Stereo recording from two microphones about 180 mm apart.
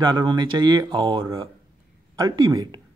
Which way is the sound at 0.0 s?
25° right (ahead or behind).